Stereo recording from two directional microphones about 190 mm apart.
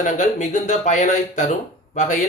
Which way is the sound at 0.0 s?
40° left (ahead or behind).